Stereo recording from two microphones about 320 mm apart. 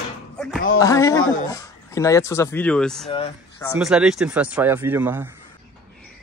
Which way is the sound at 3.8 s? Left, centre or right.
Centre.